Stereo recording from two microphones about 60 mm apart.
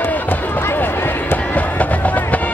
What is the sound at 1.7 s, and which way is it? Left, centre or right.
Music, left.